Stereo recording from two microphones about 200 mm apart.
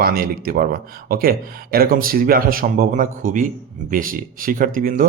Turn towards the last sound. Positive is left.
turn(degrees=-45)  # may be behind; listen again after turning